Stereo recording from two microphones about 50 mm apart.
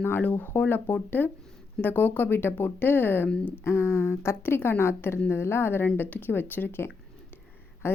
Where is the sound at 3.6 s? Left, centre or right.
Left.